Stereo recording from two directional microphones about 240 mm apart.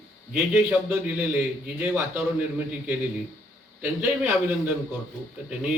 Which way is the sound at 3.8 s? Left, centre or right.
Centre.